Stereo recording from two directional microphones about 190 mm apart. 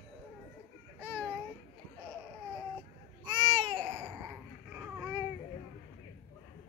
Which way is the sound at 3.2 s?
25° right (ahead or behind).